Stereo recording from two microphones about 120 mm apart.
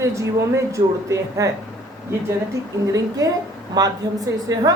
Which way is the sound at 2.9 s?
30° right (ahead or behind).